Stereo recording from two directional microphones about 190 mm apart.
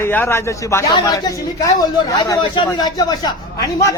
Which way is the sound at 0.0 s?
10° left (ahead or behind).